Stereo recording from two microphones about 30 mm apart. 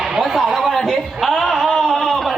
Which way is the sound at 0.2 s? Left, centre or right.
Centre.